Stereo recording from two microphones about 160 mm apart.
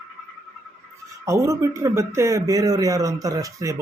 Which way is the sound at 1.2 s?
20° right (ahead or behind).